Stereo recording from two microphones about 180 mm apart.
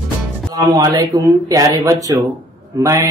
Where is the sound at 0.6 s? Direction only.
20° right (ahead or behind).